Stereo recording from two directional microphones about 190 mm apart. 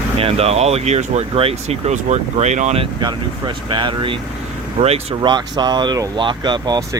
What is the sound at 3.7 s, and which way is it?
Speech, 25° right (ahead or behind).